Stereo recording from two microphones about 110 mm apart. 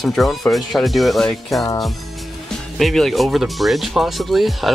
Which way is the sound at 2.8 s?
Centre (ahead or behind).